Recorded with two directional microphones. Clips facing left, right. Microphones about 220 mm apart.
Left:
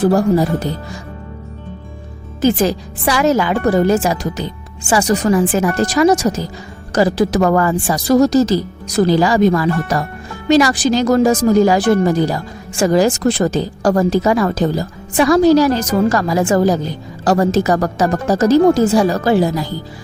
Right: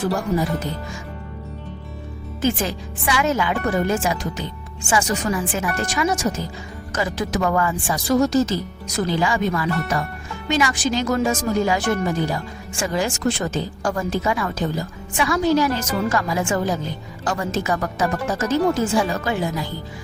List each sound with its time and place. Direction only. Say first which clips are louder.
0.0 s speech: left 9 dB; 35° left (ahead or behind)
2.4 s speech: left 8 dB; 35° left (ahead or behind)